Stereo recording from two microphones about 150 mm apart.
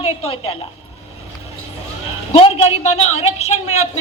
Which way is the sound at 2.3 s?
40° left (ahead or behind).